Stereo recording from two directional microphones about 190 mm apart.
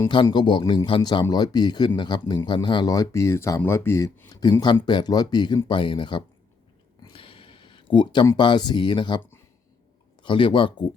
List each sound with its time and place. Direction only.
0.1 s speech: 25° left (ahead or behind)
7.0 s a sound: 30° left (ahead or behind)
10.2 s speech: 25° left (ahead or behind)